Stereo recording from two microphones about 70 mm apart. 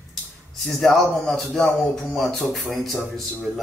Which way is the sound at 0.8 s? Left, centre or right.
Centre.